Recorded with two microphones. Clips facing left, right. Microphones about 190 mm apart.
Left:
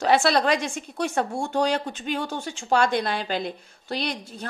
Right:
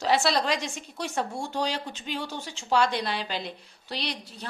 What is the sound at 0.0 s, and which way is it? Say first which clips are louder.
A woman's voice: left 4 dB; 55° left (ahead or behind).